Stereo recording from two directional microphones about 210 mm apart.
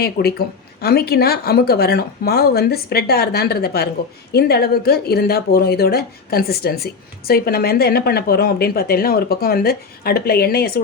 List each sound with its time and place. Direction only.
0.0 s speech: 50° left (ahead or behind)